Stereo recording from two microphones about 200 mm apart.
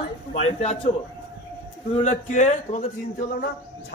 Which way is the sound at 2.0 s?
35° left (ahead or behind).